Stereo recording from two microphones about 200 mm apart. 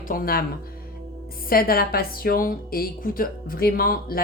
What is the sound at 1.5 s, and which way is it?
Speech, 45° left (ahead or behind).